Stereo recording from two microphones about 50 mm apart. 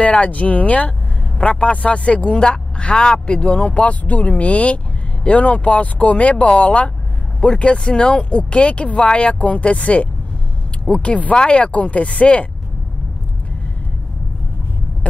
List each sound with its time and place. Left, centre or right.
0.0 s speech: left